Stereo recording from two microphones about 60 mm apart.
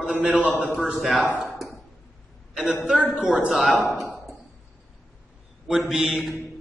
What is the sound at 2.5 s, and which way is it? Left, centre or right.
Speech, centre.